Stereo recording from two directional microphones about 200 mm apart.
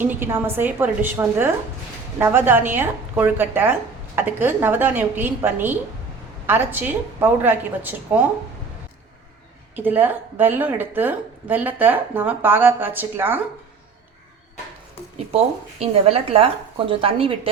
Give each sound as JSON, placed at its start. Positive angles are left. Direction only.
{"t": 0.0, "sound": "a woman's voice", "side_deg": -10}
{"t": 9.7, "sound": "a woman's voice", "side_deg": -10}
{"t": 15.3, "sound": "speech", "side_deg": -30}